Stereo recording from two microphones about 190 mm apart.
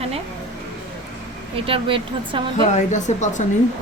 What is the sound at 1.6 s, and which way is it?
A woman's voice, 30° right (ahead or behind).